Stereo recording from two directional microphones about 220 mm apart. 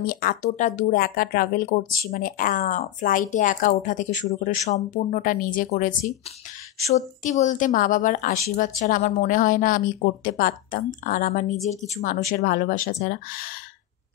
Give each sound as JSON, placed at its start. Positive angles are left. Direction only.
{"t": 0.0, "sound": "a woman's voice", "side_deg": 40}